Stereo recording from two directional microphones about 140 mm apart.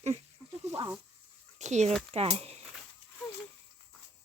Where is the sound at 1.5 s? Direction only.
55° right (ahead or behind).